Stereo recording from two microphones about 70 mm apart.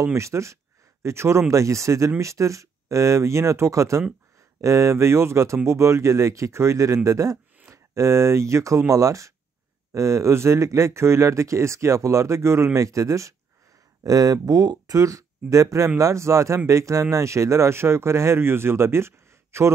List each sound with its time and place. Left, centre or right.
0.0 s speech: right
14.0 s speech: right